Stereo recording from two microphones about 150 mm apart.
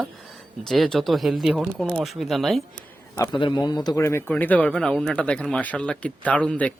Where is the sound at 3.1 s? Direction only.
20° left (ahead or behind).